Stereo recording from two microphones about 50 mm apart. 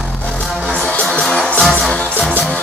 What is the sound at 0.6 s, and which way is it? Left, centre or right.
Music, left.